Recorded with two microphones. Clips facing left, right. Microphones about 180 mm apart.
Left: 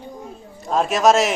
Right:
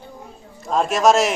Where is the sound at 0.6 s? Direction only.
Centre (ahead or behind).